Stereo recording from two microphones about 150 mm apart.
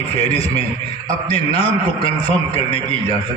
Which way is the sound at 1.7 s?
40° left (ahead or behind).